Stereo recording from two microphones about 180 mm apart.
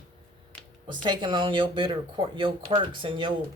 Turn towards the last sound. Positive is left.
turn(degrees=-30)  # may be behind; listen again after turning